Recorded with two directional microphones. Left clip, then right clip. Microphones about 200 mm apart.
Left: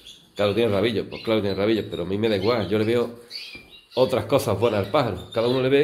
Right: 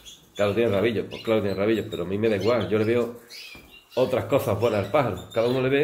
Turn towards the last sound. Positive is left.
turn(degrees=25)  # may be behind; listen again after turning